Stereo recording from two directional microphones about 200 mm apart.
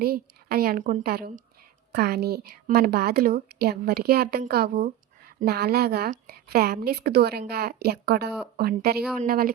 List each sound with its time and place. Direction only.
0.0 s a woman's voice: 50° right (ahead or behind)